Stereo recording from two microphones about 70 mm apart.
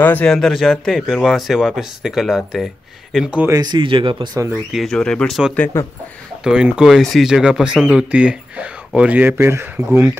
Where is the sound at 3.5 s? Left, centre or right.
Right.